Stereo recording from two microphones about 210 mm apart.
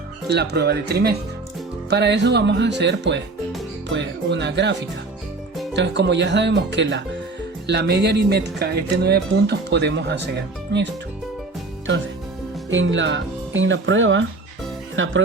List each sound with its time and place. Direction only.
0.3 s speech: 50° right (ahead or behind)
5.7 s speech: 55° right (ahead or behind)
12.7 s speech: 65° right (ahead or behind)